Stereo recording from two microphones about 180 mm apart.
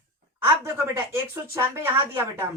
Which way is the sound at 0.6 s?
15° right (ahead or behind).